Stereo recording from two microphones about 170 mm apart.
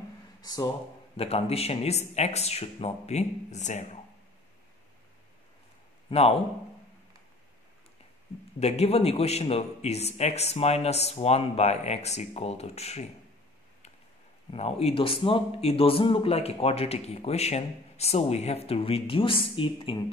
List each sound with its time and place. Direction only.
0.4 s speech: 25° left (ahead or behind)
1.1 s a man's voice: 35° left (ahead or behind)
6.0 s a man's voice: 35° left (ahead or behind)
8.5 s a man's voice: 40° left (ahead or behind)
14.5 s a man's voice: 40° left (ahead or behind)